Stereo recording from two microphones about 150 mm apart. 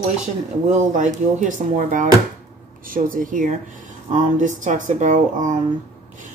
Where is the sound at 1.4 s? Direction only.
55° right (ahead or behind).